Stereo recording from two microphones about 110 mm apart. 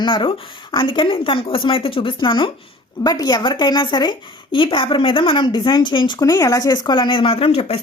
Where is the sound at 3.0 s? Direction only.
35° left (ahead or behind).